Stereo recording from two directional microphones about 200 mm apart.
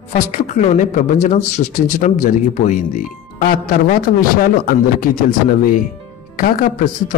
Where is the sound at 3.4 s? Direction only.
45° left (ahead or behind).